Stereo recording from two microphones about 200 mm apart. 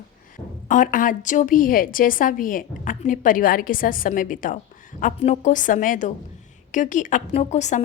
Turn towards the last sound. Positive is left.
turn(degrees=35)  # may be behind; listen again after turning